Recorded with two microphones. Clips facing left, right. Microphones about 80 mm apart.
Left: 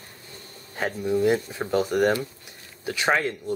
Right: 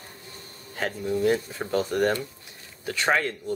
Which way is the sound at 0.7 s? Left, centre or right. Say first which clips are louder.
Left 3 dB; centre.